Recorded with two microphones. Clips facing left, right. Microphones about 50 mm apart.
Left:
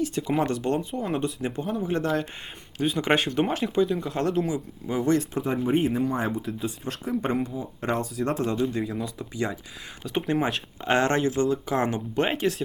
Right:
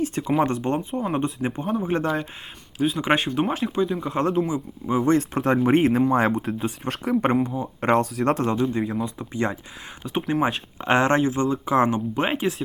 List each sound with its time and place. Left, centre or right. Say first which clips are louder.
0.0 s speech: right 3 dB; right
0.9 s speech: right 3 dB; centre
1.1 s speech: right 1 dB; right
2.7 s speech: right 2 dB; centre
4.1 s speech: right 3 dB; right
5.4 s speech: right 5 dB; right
6.3 s speech: right 4 dB; right
8.7 s speech: right 4 dB; right
10.0 s speech: right 1 dB; centre
10.8 s speech: right 3 dB; right
12.1 s speech: right 1 dB; centre